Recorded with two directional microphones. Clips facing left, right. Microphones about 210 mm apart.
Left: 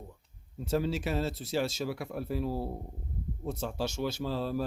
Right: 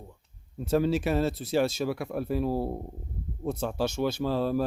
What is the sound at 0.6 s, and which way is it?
Speech, 55° right (ahead or behind).